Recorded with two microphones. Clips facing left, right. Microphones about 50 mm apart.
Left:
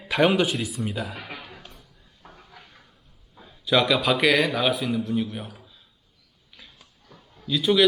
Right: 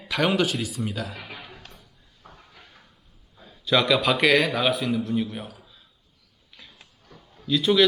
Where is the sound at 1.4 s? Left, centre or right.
Centre.